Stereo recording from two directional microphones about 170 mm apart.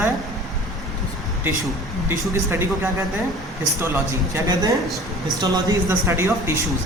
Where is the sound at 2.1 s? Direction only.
15° right (ahead or behind).